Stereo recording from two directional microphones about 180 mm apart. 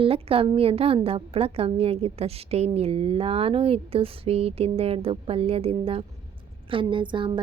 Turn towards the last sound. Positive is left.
turn(degrees=-25)  # may be behind; listen again after turning